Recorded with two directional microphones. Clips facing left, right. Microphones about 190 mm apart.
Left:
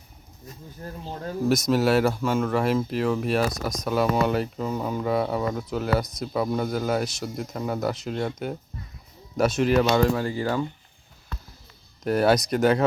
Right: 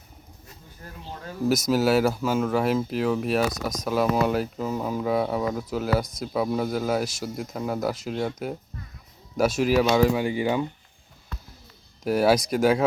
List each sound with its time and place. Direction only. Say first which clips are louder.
0.8 s speech: left 7 dB; 35° left (ahead or behind)
1.5 s speech: even; 5° right (ahead or behind)
12.0 s speech: even; 5° right (ahead or behind)